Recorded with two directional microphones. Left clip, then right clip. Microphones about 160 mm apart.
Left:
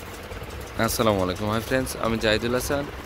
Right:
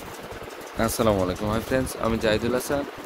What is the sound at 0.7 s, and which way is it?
Speech, centre (ahead or behind).